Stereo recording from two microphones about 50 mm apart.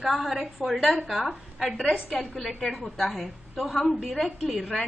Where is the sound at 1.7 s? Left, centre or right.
Left.